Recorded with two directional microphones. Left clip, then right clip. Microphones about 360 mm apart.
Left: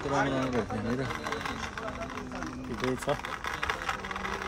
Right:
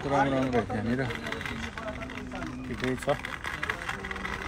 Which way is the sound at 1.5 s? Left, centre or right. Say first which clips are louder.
Even; centre.